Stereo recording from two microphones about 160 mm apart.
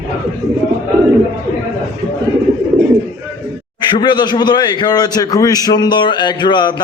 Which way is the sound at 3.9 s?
25° left (ahead or behind).